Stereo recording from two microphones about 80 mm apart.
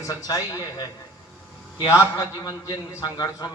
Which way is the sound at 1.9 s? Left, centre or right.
Left.